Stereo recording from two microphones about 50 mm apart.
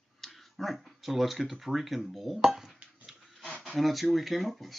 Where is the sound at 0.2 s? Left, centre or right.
Centre.